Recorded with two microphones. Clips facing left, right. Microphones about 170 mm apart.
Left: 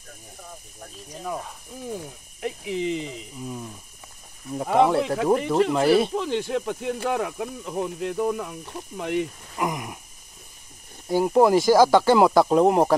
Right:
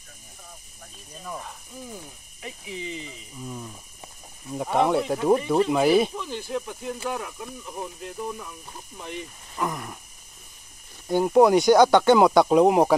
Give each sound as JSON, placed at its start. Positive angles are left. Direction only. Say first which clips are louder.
{"t": 1.1, "sound": "mechanisms", "louder": "left 5 dB", "side_deg": 60}
{"t": 2.4, "sound": "speech", "louder": "left 9 dB", "side_deg": 80}
{"t": 4.7, "sound": "speech", "louder": "left 3 dB", "side_deg": 0}
{"t": 5.0, "sound": "speech", "louder": "left 1 dB", "side_deg": 65}
{"t": 5.7, "sound": "speech", "louder": "right 1 dB", "side_deg": -5}
{"t": 6.1, "sound": "speech", "louder": "left 6 dB", "side_deg": 90}
{"t": 9.6, "sound": "a sound", "louder": "left 2 dB", "side_deg": 10}
{"t": 11.1, "sound": "speech", "louder": "right 1 dB", "side_deg": 5}